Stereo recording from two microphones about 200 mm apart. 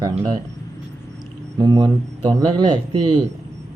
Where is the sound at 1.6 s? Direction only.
20° right (ahead or behind).